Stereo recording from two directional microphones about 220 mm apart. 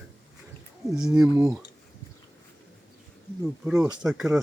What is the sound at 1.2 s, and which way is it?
Speech, 15° right (ahead or behind).